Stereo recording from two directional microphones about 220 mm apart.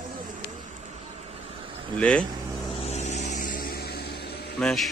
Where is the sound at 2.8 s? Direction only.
30° left (ahead or behind); by 4.6 s 45° left (ahead or behind).